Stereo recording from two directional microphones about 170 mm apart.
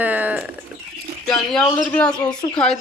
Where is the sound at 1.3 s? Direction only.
Centre (ahead or behind).